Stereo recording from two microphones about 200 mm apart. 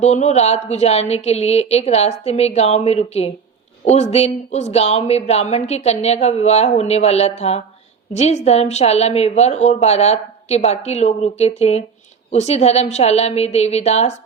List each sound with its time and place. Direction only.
0.0 s speech: 35° left (ahead or behind)